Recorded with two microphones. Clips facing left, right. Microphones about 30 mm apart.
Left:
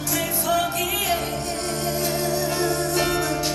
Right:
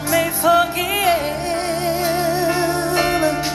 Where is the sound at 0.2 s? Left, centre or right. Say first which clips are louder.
Right 7 dB; right.